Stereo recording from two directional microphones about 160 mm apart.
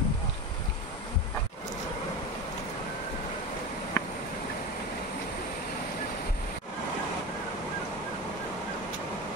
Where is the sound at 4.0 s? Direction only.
20° left (ahead or behind).